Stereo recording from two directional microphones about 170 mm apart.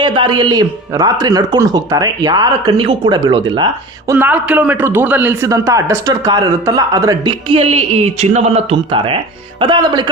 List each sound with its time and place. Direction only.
0.0 s a man's voice: 25° right (ahead or behind)
4.1 s a man's voice: 10° right (ahead or behind); by 10.1 s 25° right (ahead or behind)